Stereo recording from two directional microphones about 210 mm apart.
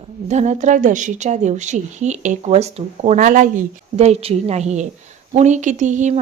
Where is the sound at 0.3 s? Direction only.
35° right (ahead or behind).